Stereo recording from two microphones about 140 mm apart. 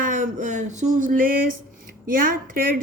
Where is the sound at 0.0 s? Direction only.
70° right (ahead or behind).